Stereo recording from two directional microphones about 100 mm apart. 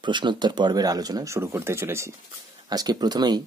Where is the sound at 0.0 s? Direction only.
50° right (ahead or behind); by 2.1 s 25° right (ahead or behind).